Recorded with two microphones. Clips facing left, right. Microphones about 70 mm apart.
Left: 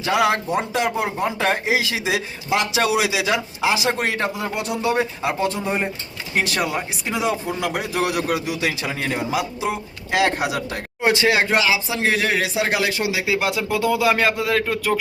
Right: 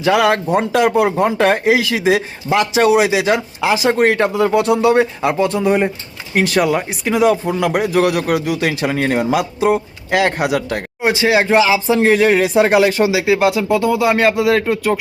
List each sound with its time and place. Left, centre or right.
0.0 s speech: right
4.4 s speech: right
5.2 s speech: right
11.0 s speech: centre
11.9 s speech: right
13.2 s speech: right
13.7 s speech: centre
14.3 s speech: centre